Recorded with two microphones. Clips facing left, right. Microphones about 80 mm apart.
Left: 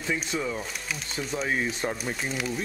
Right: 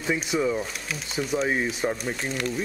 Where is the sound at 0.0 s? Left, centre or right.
Centre.